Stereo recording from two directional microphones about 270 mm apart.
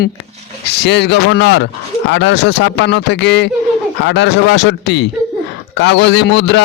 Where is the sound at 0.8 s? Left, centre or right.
Left.